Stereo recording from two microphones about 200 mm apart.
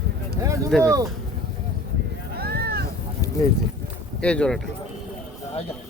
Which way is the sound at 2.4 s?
50° right (ahead or behind).